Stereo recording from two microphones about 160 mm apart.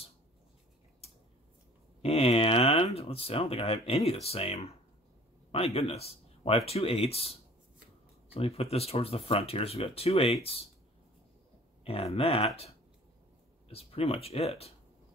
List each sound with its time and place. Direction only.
2.0 s speech: 40° left (ahead or behind)
11.8 s speech: 40° left (ahead or behind)
13.7 s speech: 35° left (ahead or behind)